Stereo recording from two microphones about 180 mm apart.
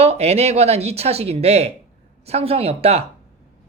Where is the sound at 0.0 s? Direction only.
35° right (ahead or behind).